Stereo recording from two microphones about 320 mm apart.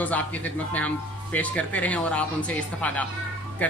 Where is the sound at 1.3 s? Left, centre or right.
Centre.